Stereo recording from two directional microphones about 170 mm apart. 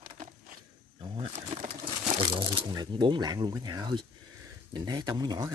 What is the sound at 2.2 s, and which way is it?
Speech, 30° right (ahead or behind).